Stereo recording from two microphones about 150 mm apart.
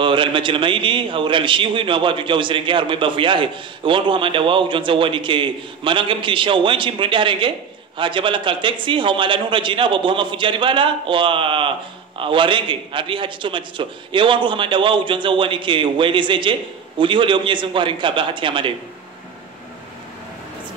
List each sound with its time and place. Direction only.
0.0 s a man's voice: 35° right (ahead or behind)